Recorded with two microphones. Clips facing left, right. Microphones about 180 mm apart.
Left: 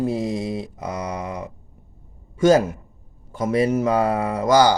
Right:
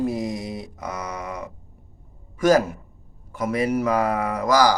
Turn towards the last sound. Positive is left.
turn(degrees=30)  # may be behind; listen again after turning